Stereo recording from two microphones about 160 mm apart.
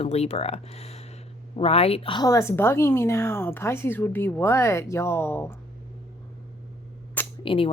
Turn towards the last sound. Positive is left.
turn(degrees=35)  # may be behind; listen again after turning